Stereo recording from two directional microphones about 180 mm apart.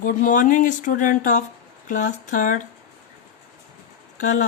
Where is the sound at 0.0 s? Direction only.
50° left (ahead or behind).